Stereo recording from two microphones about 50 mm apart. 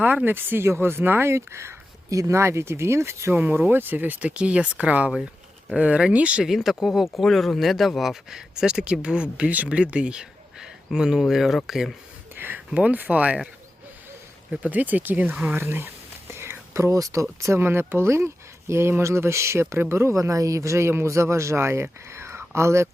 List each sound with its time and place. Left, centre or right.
0.3 s speech: right
3.3 s speech: right
4.2 s speech: right
6.4 s speech: centre
8.8 s speech: right; by 11.9 s centre
12.7 s speech: right
14.5 s speech: right
15.5 s whispering: right
16.7 s speech: right
17.4 s speech: right
17.7 s speech: right